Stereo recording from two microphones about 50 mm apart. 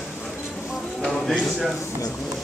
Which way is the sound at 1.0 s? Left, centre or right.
Centre.